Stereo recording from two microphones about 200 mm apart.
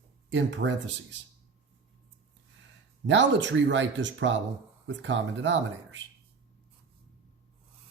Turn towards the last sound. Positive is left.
turn(degrees=-65)  # may be behind; listen again after turning